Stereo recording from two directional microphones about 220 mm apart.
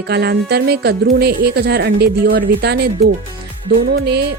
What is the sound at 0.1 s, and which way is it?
A woman's voice, 50° right (ahead or behind).